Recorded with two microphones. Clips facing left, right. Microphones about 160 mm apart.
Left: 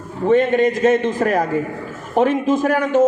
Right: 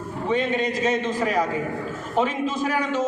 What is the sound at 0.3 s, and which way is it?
A man's voice, 55° left (ahead or behind).